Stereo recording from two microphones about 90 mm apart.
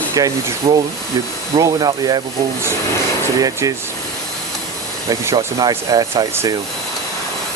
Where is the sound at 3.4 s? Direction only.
40° right (ahead or behind).